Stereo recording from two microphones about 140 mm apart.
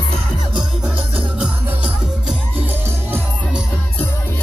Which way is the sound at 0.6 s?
5° right (ahead or behind).